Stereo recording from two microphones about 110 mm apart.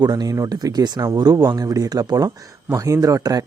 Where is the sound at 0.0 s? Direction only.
35° right (ahead or behind).